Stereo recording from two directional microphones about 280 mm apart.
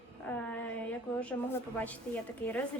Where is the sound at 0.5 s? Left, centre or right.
Centre.